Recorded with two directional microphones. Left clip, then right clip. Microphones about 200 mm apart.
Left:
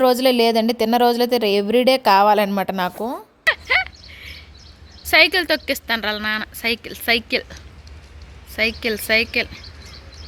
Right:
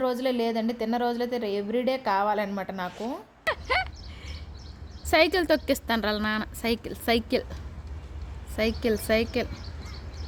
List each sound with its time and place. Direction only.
0.0 s speech: 55° left (ahead or behind)
3.4 s a sound: 5° right (ahead or behind)
5.0 s a woman's voice: centre (ahead or behind)
8.5 s a woman's voice: 5° right (ahead or behind)